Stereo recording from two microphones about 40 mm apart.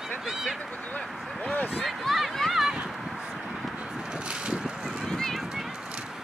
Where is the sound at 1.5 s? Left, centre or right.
Left.